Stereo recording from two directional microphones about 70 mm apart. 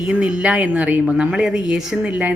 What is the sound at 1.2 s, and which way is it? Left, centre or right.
Speech, centre.